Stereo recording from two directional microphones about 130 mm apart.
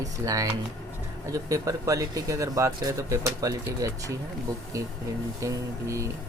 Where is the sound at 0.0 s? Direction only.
25° right (ahead or behind).